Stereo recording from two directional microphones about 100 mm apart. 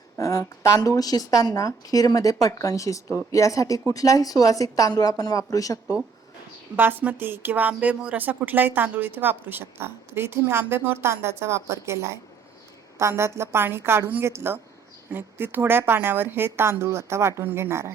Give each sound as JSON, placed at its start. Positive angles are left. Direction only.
{"t": 0.2, "sound": "speech", "side_deg": 35}
{"t": 6.7, "sound": "speech", "side_deg": -20}